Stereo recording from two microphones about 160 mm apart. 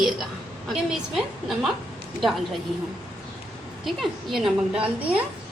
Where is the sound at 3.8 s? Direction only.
Centre (ahead or behind).